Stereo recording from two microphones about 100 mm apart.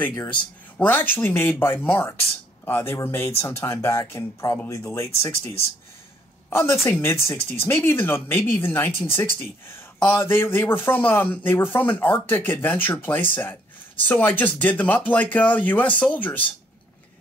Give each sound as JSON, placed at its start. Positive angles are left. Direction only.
{"t": 0.3, "sound": "speech", "side_deg": 15}
{"t": 6.5, "sound": "speech", "side_deg": 25}